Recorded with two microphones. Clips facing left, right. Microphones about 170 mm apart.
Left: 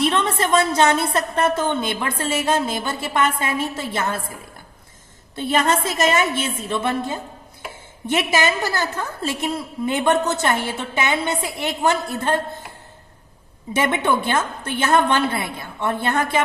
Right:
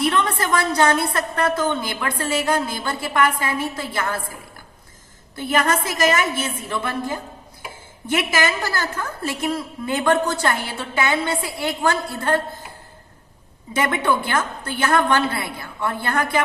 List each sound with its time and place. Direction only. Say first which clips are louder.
0.0 s a woman's voice: left 1 dB; 25° left (ahead or behind)
5.4 s a woman's voice: left 1 dB; 25° left (ahead or behind)
13.7 s a woman's voice: left 1 dB; 25° left (ahead or behind)